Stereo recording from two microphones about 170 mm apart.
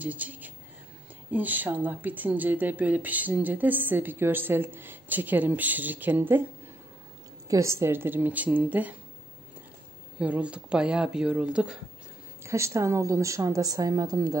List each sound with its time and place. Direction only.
0.0 s speech: 10° right (ahead or behind)
7.4 s speech: 20° right (ahead or behind)
10.1 s speech: 5° right (ahead or behind)
12.4 s a woman's voice: 15° right (ahead or behind)